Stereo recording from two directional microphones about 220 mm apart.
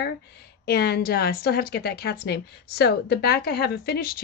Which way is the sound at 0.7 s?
45° left (ahead or behind).